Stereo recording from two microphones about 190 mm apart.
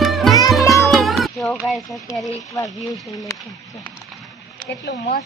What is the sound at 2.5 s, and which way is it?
Speech, 20° left (ahead or behind).